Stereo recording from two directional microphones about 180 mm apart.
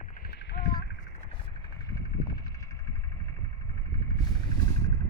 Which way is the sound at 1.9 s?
20° left (ahead or behind).